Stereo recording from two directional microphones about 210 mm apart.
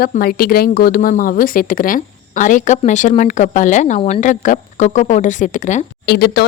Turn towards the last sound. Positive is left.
turn(degrees=50)  # may be behind; listen again after turning